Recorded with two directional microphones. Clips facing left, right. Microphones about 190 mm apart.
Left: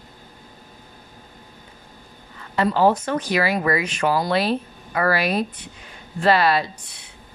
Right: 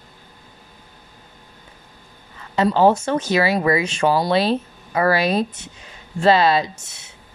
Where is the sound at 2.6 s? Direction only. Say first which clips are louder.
Right 2 dB; 25° right (ahead or behind).